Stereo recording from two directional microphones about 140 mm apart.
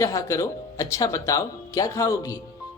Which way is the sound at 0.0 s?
25° left (ahead or behind).